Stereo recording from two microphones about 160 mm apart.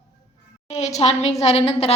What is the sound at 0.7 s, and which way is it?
A woman's voice, 45° left (ahead or behind).